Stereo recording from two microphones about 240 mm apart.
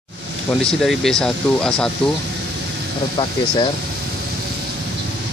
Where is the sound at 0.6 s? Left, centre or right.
Centre.